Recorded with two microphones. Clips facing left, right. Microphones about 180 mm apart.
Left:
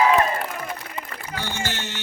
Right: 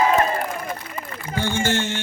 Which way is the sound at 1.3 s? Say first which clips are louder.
Right 8 dB; 50° right (ahead or behind).